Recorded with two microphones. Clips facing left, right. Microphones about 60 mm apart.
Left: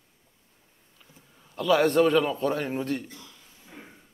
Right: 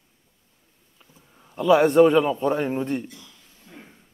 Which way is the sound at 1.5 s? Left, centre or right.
Centre.